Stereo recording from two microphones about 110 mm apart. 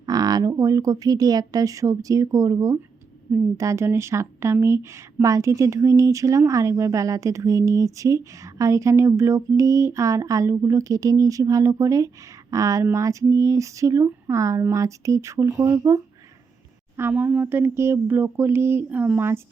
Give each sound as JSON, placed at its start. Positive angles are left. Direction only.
{"t": 0.0, "sound": "speech", "side_deg": -35}
{"t": 17.0, "sound": "speech", "side_deg": -20}